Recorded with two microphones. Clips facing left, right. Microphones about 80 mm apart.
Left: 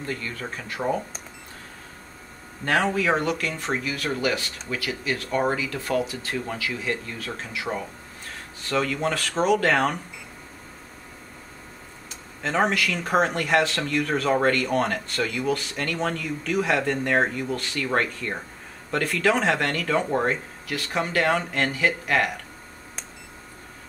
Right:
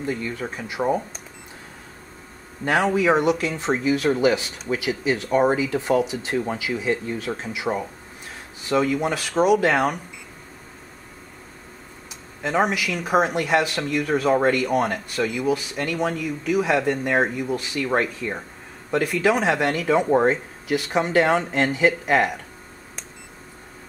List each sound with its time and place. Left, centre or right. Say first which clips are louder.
0.0 s speech: right 4 dB; centre
2.6 s speech: right 3 dB; centre
12.4 s speech: right 1 dB; centre